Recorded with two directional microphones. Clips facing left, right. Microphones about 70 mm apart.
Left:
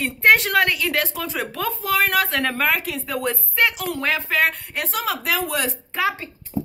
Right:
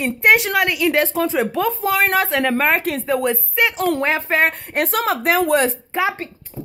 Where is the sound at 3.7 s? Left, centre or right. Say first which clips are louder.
Right 8 dB; right.